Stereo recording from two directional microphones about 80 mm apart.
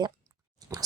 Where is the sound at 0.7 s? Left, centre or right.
Right.